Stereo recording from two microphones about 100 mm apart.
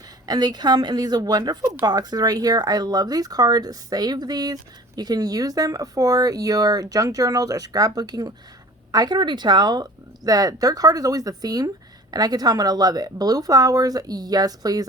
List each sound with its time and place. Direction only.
0.3 s speech: 45° right (ahead or behind)